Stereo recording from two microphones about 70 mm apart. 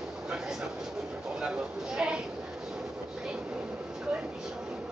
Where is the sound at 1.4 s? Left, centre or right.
Centre.